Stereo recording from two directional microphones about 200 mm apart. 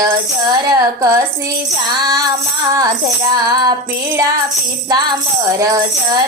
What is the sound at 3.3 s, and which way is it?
Music, 20° right (ahead or behind).